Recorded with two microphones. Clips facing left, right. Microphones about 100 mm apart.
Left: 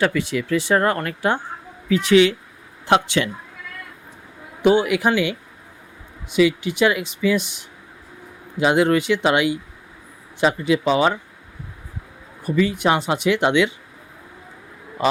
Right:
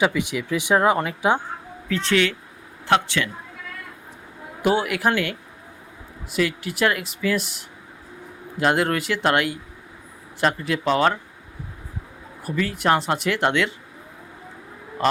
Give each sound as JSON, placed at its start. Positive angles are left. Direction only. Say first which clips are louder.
{"t": 0.0, "sound": "speech", "louder": "left 1 dB", "side_deg": -10}
{"t": 1.9, "sound": "a woman's voice", "louder": "left 7 dB", "side_deg": 10}
{"t": 4.6, "sound": "speech", "louder": "left 4 dB", "side_deg": -5}
{"t": 12.4, "sound": "speech", "louder": "left 5 dB", "side_deg": 0}